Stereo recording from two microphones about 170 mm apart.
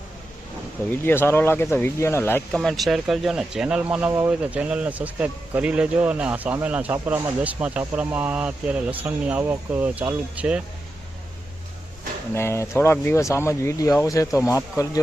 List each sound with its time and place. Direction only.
0.9 s speech: 15° left (ahead or behind)
2.6 s speech: centre (ahead or behind)
12.3 s speech: 15° left (ahead or behind)